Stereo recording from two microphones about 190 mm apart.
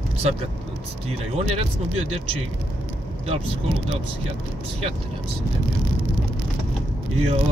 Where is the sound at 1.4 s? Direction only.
30° right (ahead or behind).